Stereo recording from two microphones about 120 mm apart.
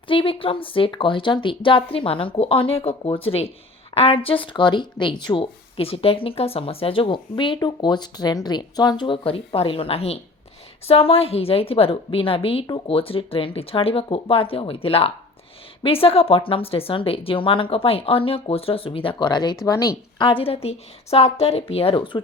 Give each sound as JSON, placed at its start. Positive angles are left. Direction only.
{"t": 0.1, "sound": "speech", "side_deg": 50}
{"t": 20.1, "sound": "speech", "side_deg": 45}